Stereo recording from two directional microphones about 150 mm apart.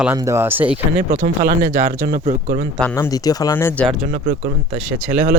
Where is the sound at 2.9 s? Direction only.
25° left (ahead or behind).